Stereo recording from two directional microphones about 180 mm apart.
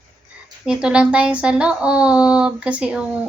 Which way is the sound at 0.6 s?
5° right (ahead or behind).